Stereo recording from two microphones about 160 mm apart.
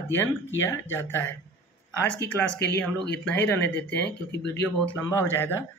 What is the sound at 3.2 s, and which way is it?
Speech, 10° left (ahead or behind).